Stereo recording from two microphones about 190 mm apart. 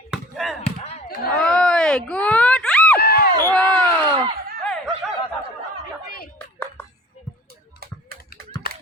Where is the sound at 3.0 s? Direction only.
55° left (ahead or behind).